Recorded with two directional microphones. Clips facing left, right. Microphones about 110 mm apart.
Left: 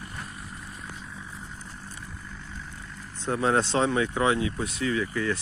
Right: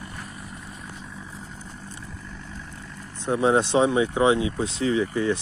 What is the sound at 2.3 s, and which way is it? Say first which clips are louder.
Vehicle: right 2 dB; 70° right (ahead or behind).